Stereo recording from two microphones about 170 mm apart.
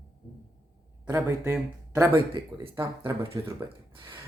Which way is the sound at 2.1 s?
30° right (ahead or behind).